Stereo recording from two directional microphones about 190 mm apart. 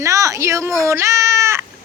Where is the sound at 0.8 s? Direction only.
15° right (ahead or behind).